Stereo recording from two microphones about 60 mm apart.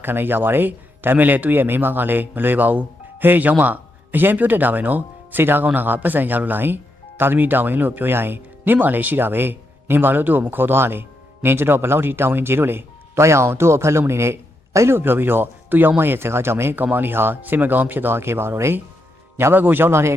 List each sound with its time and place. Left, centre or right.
0.0 s a man's voice: right
14.9 s speech: right
19.5 s speech: right